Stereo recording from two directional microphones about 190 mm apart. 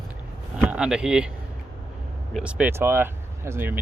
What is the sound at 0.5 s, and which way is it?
Speech, 5° right (ahead or behind).